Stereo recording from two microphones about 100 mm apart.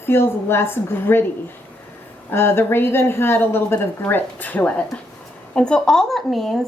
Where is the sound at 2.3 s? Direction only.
25° left (ahead or behind); by 6.6 s centre (ahead or behind).